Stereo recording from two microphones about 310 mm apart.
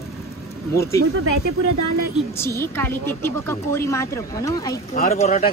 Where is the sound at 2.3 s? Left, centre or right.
Centre.